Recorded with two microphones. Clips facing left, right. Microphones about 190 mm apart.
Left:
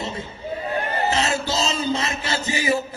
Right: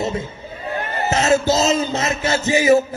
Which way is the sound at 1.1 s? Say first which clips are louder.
Right 7 dB; 45° right (ahead or behind).